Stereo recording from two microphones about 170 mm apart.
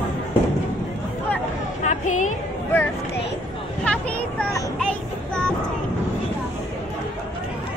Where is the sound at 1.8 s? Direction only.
45° left (ahead or behind).